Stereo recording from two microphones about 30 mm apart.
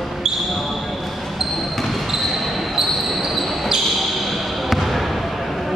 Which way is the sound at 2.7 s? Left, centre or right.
Centre.